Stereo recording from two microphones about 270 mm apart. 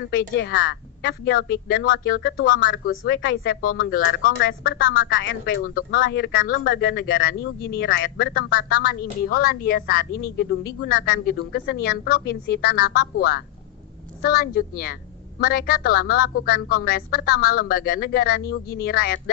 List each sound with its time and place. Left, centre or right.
0.4 s a woman's voice: left
2.8 s a woman's voice: left
4.1 s speech: left
4.6 s a woman's voice: left
4.9 s a woman's voice: left